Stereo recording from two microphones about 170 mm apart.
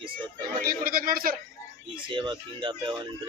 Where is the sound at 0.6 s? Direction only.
55° right (ahead or behind).